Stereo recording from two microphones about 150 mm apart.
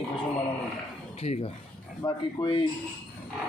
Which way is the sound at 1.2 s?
40° left (ahead or behind).